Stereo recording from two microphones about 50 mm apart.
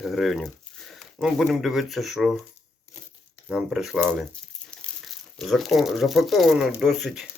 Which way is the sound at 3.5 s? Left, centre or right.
Centre.